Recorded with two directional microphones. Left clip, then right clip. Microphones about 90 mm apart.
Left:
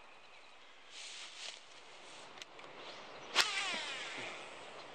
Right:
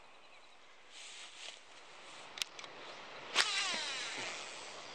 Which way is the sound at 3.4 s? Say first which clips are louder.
Right 2 dB; 20° right (ahead or behind).